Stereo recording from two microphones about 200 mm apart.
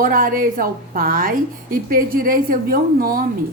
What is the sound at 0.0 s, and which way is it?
A woman's voice, 45° right (ahead or behind).